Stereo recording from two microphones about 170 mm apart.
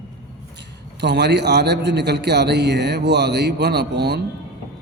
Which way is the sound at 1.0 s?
85° right.